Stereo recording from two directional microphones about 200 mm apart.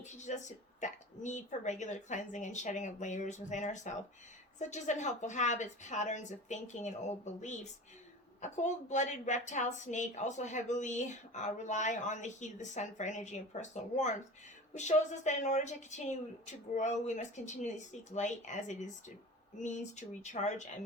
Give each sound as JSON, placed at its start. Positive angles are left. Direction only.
{"t": 0.0, "sound": "speech", "side_deg": 35}